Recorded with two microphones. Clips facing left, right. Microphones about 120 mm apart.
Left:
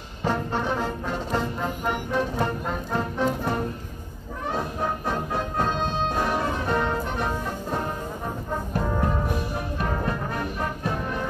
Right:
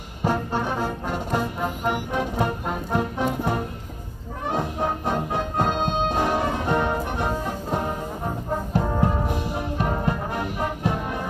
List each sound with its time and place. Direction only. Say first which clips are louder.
0.2 s music: right 2 dB; 10° right (ahead or behind)
9.0 s music: right 2 dB; 20° right (ahead or behind)